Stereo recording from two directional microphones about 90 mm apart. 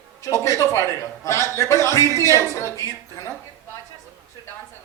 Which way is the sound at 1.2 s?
30° left (ahead or behind).